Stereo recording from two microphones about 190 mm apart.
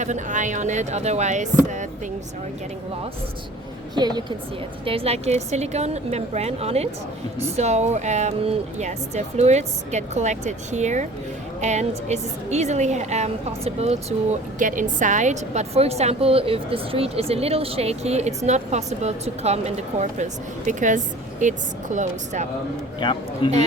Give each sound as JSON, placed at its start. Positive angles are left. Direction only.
{"t": 0.0, "sound": "a woman's voice", "side_deg": -40}
{"t": 3.9, "sound": "a woman's voice", "side_deg": -20}
{"t": 14.6, "sound": "a woman's voice", "side_deg": -45}
{"t": 23.0, "sound": "a man's voice", "side_deg": 25}